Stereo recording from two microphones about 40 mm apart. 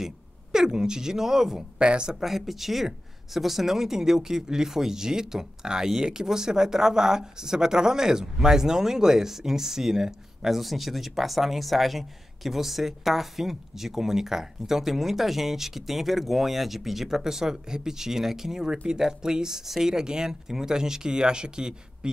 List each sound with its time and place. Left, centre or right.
0.0 s speech: centre
2.1 s speech: centre